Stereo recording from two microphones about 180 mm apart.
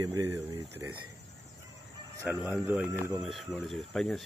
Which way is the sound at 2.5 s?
5° right (ahead or behind).